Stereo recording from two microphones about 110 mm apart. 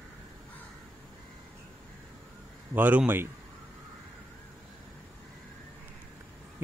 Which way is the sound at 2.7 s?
15° right (ahead or behind).